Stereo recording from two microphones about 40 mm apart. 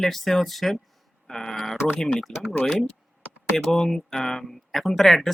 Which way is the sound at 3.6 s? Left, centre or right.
Centre.